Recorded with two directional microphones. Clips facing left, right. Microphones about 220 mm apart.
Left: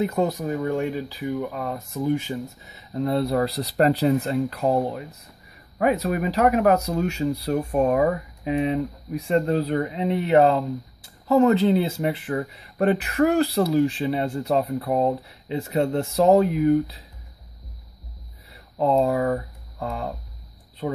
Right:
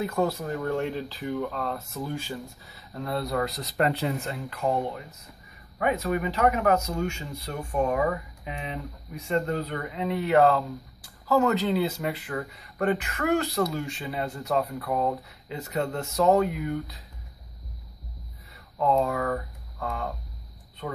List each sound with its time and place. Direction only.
0.0 s speech: 20° left (ahead or behind)
9.2 s speech: 30° left (ahead or behind)
18.8 s speech: 30° left (ahead or behind)